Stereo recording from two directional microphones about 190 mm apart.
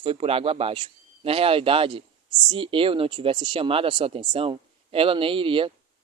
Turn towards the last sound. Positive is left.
turn(degrees=-25)  # may be behind; listen again after turning